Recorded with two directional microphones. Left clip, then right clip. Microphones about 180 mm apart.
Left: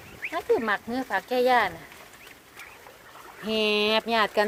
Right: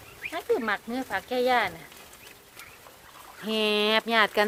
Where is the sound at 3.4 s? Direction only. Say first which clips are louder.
Left 1 dB; 5° right (ahead or behind).